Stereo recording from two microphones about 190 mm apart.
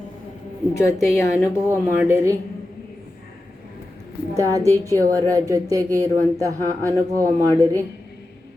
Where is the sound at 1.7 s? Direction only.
10° right (ahead or behind).